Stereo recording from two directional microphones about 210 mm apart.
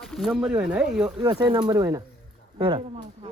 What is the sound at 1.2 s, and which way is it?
Speech, 20° right (ahead or behind).